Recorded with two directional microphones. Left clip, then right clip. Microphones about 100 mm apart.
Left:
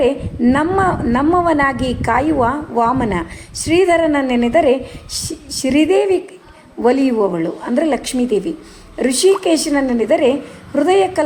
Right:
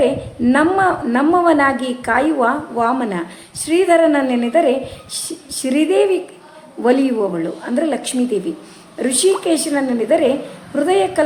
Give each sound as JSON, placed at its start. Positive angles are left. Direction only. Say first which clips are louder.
{"t": 0.0, "sound": "a woman's voice", "louder": "left 1 dB", "side_deg": 50}